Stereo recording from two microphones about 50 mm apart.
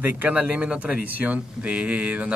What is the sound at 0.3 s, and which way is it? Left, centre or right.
Speech, right.